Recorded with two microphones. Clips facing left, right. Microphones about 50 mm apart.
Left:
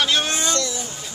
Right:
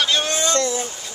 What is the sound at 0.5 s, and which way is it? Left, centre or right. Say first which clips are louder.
Speech: right 5 dB; right.